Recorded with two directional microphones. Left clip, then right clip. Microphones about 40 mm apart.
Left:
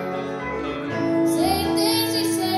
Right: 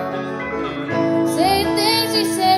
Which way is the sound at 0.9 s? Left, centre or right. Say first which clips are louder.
Right 3 dB; right.